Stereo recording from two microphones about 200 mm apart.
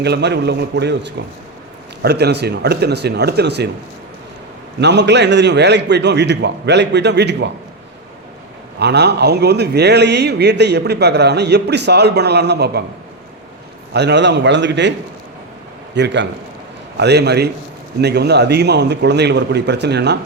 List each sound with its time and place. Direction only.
0.0 s a man's voice: 55° right (ahead or behind)
4.8 s a man's voice: 60° right (ahead or behind)
8.8 s a man's voice: 55° right (ahead or behind)
13.9 s a man's voice: 60° right (ahead or behind)
16.0 s a man's voice: 60° right (ahead or behind)